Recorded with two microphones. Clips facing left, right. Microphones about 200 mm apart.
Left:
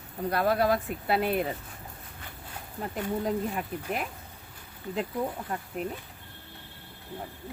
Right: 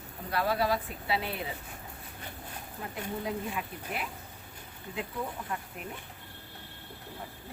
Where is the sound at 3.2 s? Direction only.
45° left (ahead or behind).